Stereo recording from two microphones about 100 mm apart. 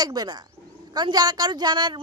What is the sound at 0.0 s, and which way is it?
A woman's voice, 40° right (ahead or behind).